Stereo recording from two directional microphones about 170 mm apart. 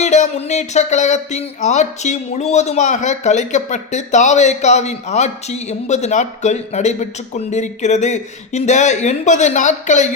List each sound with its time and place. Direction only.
0.0 s speech: 45° left (ahead or behind)